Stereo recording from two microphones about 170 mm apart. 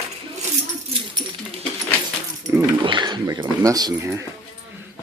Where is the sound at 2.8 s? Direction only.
25° right (ahead or behind).